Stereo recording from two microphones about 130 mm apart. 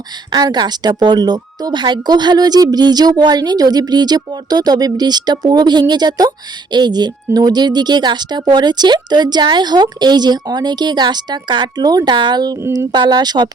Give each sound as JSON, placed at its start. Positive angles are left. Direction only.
{"t": 0.3, "sound": "speech", "side_deg": -35}